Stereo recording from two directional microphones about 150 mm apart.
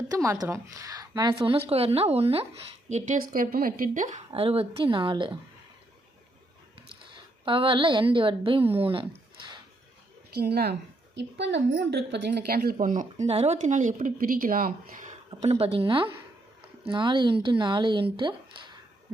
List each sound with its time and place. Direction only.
0.1 s a woman's voice: 20° right (ahead or behind); by 2.5 s 40° right (ahead or behind)
2.9 s a woman's voice: 65° right (ahead or behind)
4.3 s a woman's voice: 40° right (ahead or behind)
7.4 s a woman's voice: 35° right (ahead or behind)
10.3 s speech: 90° right
11.9 s speech: 90° right
12.7 s speech: 60° right (ahead or behind)
13.2 s speech: 45° right (ahead or behind); by 15.1 s 65° right (ahead or behind)
15.3 s a woman's voice: 45° right (ahead or behind)